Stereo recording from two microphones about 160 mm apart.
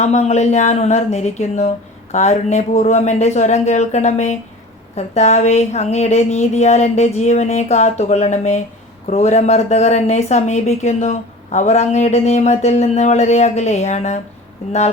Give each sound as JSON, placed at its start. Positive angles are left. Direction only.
{"t": 0.0, "sound": "speech", "side_deg": 45}